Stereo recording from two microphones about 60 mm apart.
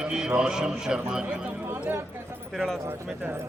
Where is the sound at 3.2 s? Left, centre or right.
Right.